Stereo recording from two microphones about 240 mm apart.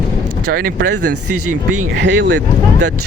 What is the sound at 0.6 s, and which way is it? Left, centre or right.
Speech, right.